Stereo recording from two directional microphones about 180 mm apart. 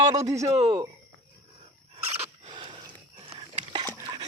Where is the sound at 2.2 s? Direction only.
30° right (ahead or behind).